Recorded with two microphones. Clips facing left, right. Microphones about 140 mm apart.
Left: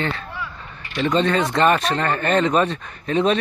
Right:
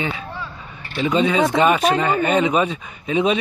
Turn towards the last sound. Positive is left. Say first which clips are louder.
# even
turn(degrees=-5)  # may be behind; listen again after turning